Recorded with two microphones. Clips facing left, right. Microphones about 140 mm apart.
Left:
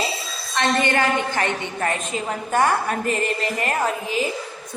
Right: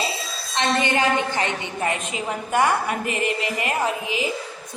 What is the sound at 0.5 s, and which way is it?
A woman's voice, 20° right (ahead or behind).